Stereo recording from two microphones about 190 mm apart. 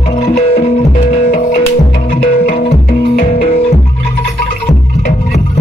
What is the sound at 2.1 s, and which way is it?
Music, 45° left (ahead or behind).